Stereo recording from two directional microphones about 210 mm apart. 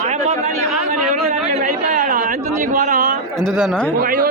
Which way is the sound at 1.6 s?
35° right (ahead or behind).